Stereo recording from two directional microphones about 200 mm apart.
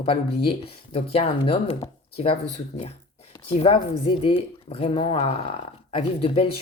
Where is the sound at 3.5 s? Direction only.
30° left (ahead or behind).